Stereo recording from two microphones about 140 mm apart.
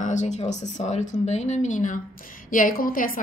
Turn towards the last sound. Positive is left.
turn(degrees=90)